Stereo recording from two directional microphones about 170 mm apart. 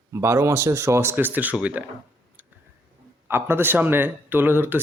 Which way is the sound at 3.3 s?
15° right (ahead or behind).